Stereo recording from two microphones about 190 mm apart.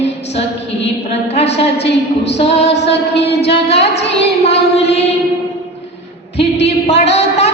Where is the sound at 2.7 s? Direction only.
60° left (ahead or behind).